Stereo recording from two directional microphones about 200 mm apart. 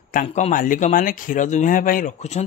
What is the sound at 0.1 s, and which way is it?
Speech, 40° left (ahead or behind).